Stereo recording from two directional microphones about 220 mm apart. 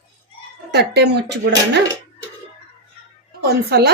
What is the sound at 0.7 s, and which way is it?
Speech, 50° right (ahead or behind).